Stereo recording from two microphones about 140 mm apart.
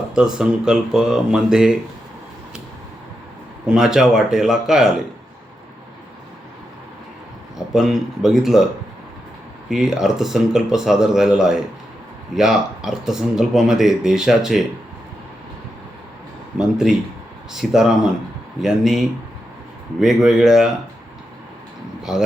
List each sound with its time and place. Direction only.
0.1 s speech: 5° right (ahead or behind)
3.7 s speech: 5° right (ahead or behind)
7.7 s speech: centre (ahead or behind)
9.6 s speech: 5° right (ahead or behind)
16.6 s speech: 5° right (ahead or behind)
22.1 s speech: 5° right (ahead or behind)